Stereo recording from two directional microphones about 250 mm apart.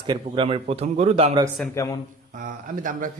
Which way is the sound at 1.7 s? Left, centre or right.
Centre.